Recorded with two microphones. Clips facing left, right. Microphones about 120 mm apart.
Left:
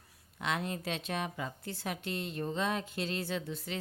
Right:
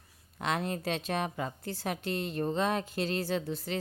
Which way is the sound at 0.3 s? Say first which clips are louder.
Right 3 dB; 40° right (ahead or behind).